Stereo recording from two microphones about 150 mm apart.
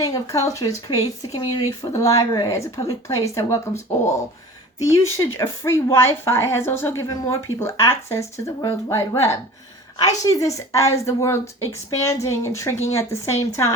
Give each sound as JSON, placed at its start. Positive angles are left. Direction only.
{"t": 0.0, "sound": "a woman's voice", "side_deg": 20}
{"t": 4.8, "sound": "a woman's voice", "side_deg": 20}